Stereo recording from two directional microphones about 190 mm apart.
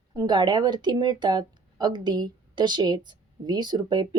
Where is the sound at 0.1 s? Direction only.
20° right (ahead or behind).